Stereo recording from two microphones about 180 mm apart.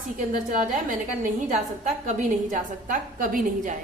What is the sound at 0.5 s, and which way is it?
A woman's voice, 45° right (ahead or behind).